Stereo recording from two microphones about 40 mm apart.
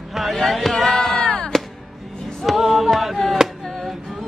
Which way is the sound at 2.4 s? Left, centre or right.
Centre.